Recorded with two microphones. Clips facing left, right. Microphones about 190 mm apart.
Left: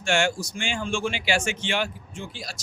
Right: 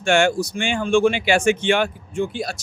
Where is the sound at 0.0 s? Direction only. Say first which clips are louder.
Right 7 dB; 55° right (ahead or behind).